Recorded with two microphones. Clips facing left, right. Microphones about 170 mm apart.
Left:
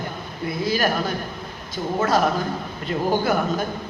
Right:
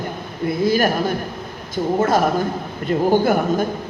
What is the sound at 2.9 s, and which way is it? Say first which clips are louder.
Speech: right 5 dB; 50° right (ahead or behind).